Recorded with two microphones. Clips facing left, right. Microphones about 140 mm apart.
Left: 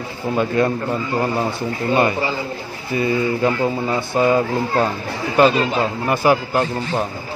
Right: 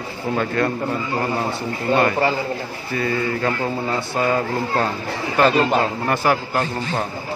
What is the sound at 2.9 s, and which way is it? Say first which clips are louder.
Speech: left 4 dB; 15° left (ahead or behind).